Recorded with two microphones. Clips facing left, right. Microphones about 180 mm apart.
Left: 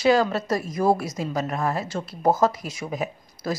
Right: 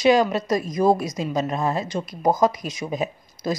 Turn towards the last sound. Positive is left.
turn(degrees=-20)  # may be behind; listen again after turning